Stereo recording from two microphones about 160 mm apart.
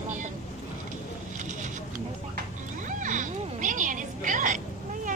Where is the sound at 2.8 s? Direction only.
50° right (ahead or behind).